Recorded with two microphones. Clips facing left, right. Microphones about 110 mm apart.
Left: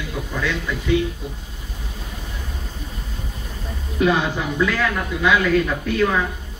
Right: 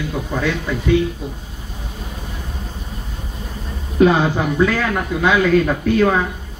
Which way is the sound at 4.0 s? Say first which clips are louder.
Right 5 dB; 35° right (ahead or behind).